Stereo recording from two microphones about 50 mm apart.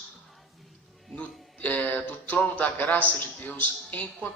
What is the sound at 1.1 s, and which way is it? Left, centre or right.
Music, left.